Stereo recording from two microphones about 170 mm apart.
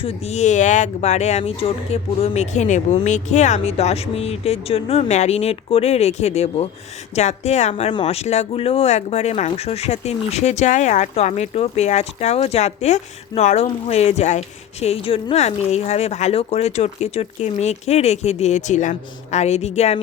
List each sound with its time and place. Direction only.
0.0 s speech: 40° left (ahead or behind)